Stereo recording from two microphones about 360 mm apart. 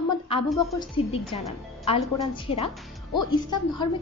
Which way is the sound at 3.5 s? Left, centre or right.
Centre.